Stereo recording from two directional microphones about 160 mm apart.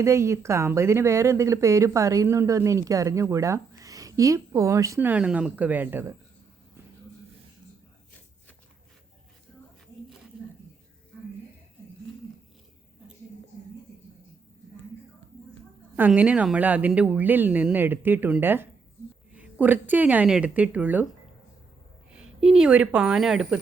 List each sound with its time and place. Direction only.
0.0 s speech: 15° right (ahead or behind)
16.0 s speech: 10° right (ahead or behind)
22.1 s speech: 5° right (ahead or behind)